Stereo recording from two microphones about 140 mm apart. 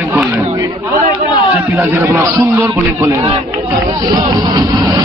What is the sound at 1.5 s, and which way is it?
A man's voice, 20° right (ahead or behind).